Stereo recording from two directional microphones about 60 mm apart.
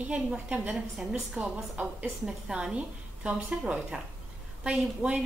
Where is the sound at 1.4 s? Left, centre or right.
Right.